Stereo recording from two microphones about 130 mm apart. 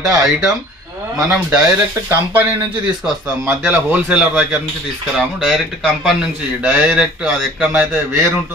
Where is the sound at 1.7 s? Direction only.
20° right (ahead or behind).